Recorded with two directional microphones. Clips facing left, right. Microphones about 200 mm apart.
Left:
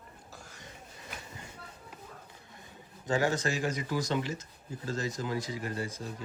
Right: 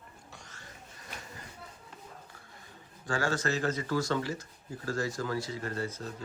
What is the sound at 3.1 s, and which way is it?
Speech, 20° left (ahead or behind).